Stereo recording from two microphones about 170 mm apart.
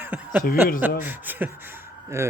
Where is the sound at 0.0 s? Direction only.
10° right (ahead or behind).